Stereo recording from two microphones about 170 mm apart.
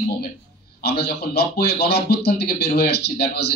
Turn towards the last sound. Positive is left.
turn(degrees=75)  # may be behind; listen again after turning